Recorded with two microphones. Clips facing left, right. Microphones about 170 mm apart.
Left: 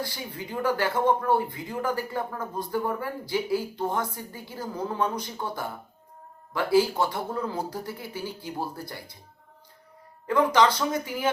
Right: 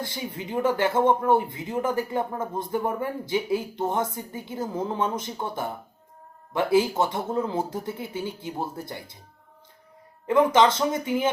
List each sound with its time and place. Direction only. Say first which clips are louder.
0.0 s speech: right 2 dB; 25° right (ahead or behind)
10.2 s speech: right 2 dB; 20° right (ahead or behind)